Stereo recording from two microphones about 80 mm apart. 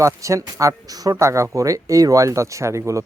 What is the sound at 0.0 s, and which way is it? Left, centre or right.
Speech, right.